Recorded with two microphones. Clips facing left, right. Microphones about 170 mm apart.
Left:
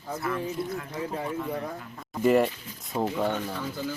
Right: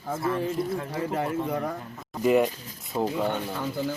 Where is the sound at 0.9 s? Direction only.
85° right.